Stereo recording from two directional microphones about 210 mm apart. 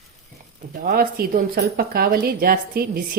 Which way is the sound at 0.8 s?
45° right (ahead or behind).